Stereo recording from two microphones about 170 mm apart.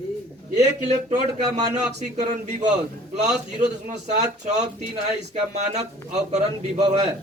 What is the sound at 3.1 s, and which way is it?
A man's voice, 40° right (ahead or behind).